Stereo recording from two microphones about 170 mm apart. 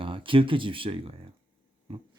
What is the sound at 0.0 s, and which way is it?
Speech, 30° right (ahead or behind).